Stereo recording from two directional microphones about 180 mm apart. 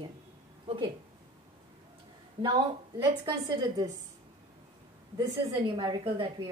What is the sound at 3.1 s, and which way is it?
Speech, 20° right (ahead or behind).